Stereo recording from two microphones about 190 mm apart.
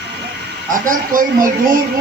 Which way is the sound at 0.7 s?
45° right (ahead or behind).